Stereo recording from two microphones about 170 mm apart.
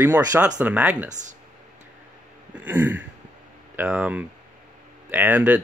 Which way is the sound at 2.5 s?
10° right (ahead or behind).